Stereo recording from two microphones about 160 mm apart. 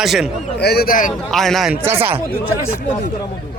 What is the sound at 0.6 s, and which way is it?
Speech, 80° left.